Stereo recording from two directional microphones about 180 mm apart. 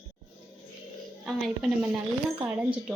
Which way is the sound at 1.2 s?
Centre (ahead or behind).